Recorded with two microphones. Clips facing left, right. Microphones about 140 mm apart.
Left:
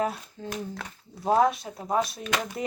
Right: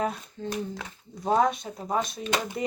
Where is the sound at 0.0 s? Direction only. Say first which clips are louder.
Even; 5° left (ahead or behind).